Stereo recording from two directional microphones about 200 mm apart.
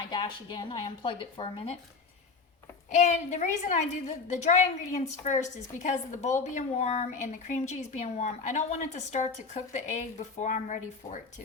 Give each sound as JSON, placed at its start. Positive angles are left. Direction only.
{"t": 0.1, "sound": "speech", "side_deg": 20}
{"t": 2.9, "sound": "a woman's voice", "side_deg": 35}